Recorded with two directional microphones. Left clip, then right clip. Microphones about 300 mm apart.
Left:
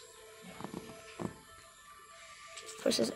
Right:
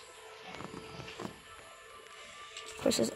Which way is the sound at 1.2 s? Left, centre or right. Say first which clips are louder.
Left 4 dB; left.